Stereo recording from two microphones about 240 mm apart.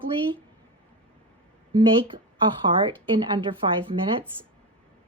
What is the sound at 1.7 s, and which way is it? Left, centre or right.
Speech, centre.